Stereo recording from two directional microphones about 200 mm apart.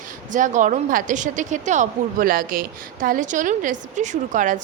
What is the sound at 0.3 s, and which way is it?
A woman's voice, 40° right (ahead or behind).